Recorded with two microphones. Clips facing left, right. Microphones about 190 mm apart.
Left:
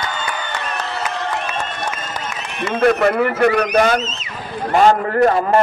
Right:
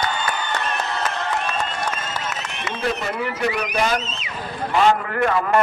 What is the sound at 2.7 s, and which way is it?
Speech, 60° left (ahead or behind).